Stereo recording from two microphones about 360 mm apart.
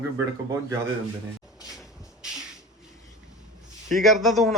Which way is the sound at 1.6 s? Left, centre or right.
Centre.